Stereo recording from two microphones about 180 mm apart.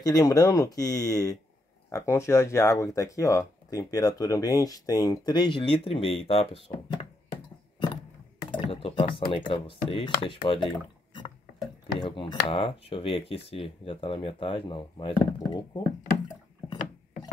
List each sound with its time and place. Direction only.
0.0 s speech: 20° left (ahead or behind)
8.5 s speech: 30° left (ahead or behind)